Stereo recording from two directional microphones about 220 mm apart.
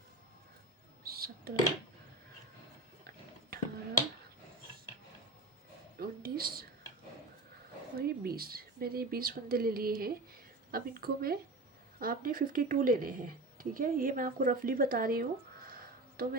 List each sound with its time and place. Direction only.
1.0 s a sound: 45° right (ahead or behind)
3.5 s finger snapping: 45° right (ahead or behind)
6.0 s a woman's voice: 45° right (ahead or behind)
7.9 s a woman's voice: 45° right (ahead or behind)